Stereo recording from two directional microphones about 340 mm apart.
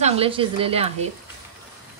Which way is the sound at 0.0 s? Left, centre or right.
Centre.